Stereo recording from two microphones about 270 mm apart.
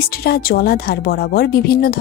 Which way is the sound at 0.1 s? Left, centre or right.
Left.